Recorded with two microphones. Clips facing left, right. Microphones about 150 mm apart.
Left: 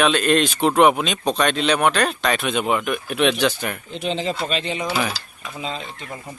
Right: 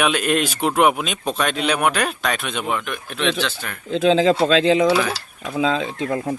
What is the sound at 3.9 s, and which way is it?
Speech, 90° right.